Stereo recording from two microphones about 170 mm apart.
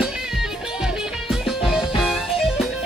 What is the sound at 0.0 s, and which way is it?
Music, 5° right (ahead or behind).